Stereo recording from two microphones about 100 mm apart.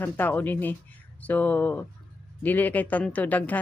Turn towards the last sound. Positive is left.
turn(degrees=15)  # may be behind; listen again after turning